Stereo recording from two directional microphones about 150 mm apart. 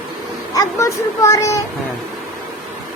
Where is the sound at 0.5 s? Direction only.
20° left (ahead or behind).